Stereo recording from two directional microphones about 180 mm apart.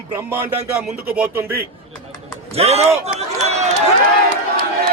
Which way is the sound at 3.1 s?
35° right (ahead or behind).